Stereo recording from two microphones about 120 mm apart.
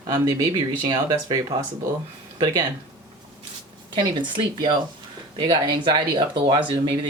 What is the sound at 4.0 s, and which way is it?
Speech, 40° right (ahead or behind).